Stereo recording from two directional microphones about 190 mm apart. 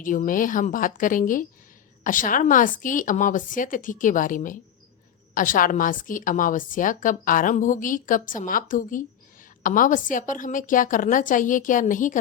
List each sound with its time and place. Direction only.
0.0 s a woman's voice: 45° left (ahead or behind)